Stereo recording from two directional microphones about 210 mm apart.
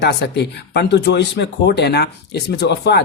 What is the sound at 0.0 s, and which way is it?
Speech, 55° left (ahead or behind).